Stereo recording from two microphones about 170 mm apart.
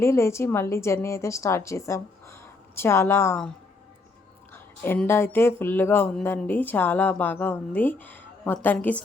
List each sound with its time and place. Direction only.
0.0 s a woman's voice: 15° left (ahead or behind)
4.5 s a woman's voice: 10° left (ahead or behind)